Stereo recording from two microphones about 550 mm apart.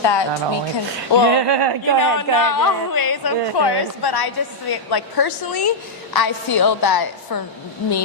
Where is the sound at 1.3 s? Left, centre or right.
Right.